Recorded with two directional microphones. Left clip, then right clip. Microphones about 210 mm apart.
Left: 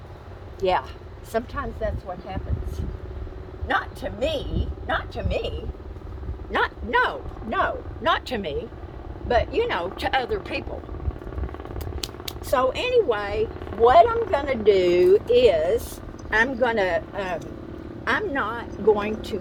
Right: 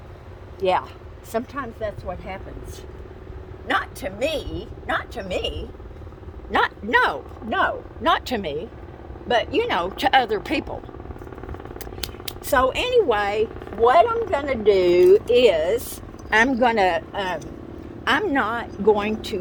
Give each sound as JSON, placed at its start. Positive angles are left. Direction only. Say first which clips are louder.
{"t": 0.6, "sound": "speech", "louder": "right 2 dB", "side_deg": -20}
{"t": 3.7, "sound": "speech", "louder": "right 1 dB", "side_deg": -40}
{"t": 6.5, "sound": "a man's voice", "louder": "right 3 dB", "side_deg": -40}
{"t": 7.5, "sound": "a woman's voice", "louder": "right 2 dB", "side_deg": -30}
{"t": 11.9, "sound": "a sound", "louder": "right 1 dB", "side_deg": -15}
{"t": 12.5, "sound": "a woman's voice", "louder": "right 2 dB", "side_deg": -45}
{"t": 13.8, "sound": "speech", "louder": "left 1 dB", "side_deg": -20}
{"t": 18.0, "sound": "a woman's voice", "louder": "right 4 dB", "side_deg": -45}